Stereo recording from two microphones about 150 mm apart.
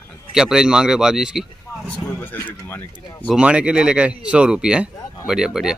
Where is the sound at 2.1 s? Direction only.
15° left (ahead or behind).